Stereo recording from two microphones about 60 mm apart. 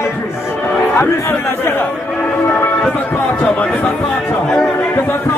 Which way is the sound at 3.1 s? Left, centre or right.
Left.